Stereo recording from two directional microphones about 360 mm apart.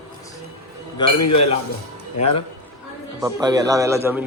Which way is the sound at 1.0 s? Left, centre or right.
Left.